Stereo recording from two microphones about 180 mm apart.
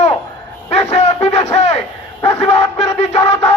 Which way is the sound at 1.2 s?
35° left (ahead or behind).